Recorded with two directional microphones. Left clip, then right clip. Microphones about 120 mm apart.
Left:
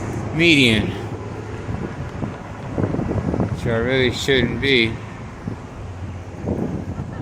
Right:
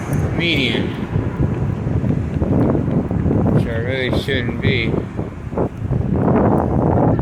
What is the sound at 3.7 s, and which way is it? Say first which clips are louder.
Speech: left 2 dB; 70° left (ahead or behind).